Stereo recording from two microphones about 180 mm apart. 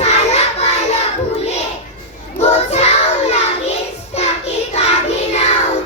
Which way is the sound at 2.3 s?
35° left (ahead or behind).